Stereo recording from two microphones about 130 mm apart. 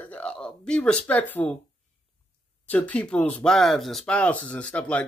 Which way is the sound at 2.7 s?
10° left (ahead or behind).